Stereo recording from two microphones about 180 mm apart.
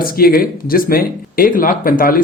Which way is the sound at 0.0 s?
55° left (ahead or behind).